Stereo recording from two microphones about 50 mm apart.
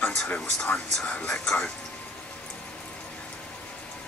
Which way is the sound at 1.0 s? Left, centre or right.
Left.